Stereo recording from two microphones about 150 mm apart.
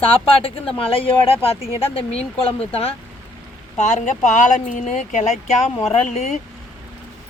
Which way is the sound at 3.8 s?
50° left (ahead or behind).